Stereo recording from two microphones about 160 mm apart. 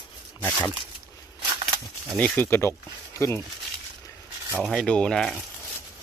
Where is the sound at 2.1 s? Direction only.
10° left (ahead or behind).